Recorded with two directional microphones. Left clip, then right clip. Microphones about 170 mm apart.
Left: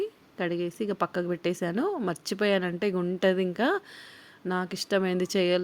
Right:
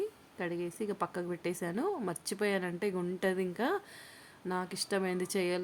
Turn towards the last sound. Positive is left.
turn(degrees=25)  # may be behind; listen again after turning